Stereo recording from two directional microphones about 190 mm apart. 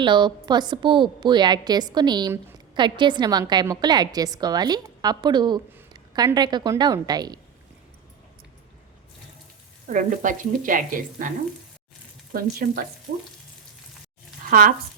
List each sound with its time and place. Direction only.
0.0 s a woman's voice: 25° right (ahead or behind)
9.8 s speech: 45° right (ahead or behind)
12.3 s speech: 50° right (ahead or behind)